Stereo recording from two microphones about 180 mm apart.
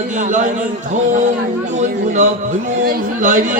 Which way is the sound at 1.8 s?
40° right (ahead or behind).